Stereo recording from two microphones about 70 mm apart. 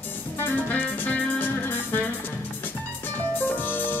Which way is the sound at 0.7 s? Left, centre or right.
Left.